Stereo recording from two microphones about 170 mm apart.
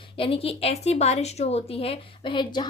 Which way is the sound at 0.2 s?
35° left (ahead or behind).